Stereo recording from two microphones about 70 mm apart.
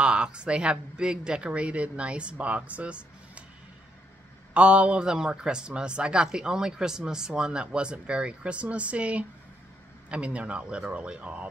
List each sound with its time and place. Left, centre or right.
0.0 s a man's voice: centre
4.6 s a man's voice: centre